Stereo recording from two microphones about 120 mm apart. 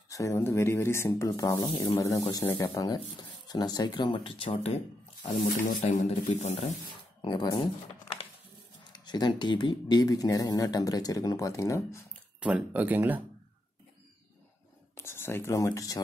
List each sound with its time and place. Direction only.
0.1 s speech: 25° left (ahead or behind)
1.4 s speech: 35° left (ahead or behind)
2.0 s speech: 25° left (ahead or behind); by 4.7 s 55° left (ahead or behind)
5.4 s speech: 80° left
7.2 s speech: 40° left (ahead or behind)
8.9 s speech: 35° left (ahead or behind)
12.4 s speech: 10° right (ahead or behind)
15.0 s speech: 20° left (ahead or behind)